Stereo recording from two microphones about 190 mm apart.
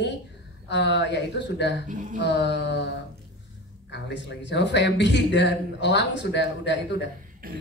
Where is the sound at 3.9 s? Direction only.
70° left (ahead or behind).